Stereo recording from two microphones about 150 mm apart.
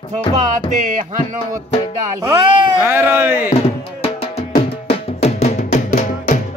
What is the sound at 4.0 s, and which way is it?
Music, 40° left (ahead or behind).